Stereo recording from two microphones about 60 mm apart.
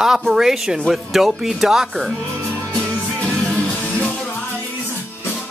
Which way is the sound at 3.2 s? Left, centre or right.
Centre.